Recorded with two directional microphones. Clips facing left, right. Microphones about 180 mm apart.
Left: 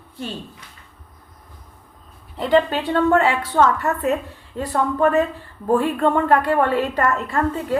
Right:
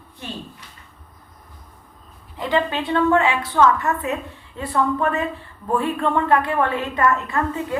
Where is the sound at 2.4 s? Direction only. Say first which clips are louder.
Left 4 dB; 35° left (ahead or behind).